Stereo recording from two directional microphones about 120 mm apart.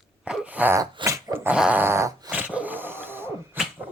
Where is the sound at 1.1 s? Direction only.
25° right (ahead or behind).